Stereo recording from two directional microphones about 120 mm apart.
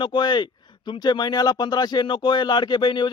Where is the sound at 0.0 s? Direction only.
40° left (ahead or behind).